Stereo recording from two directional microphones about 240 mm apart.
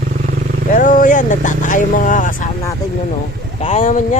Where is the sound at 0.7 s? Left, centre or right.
Left.